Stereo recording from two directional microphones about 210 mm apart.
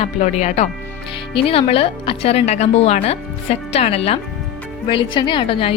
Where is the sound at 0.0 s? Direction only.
30° left (ahead or behind).